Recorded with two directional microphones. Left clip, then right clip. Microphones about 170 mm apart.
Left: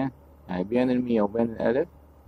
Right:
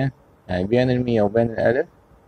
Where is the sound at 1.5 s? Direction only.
15° right (ahead or behind).